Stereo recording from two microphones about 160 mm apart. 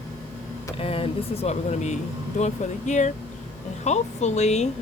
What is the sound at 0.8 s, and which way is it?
Speech, 35° left (ahead or behind).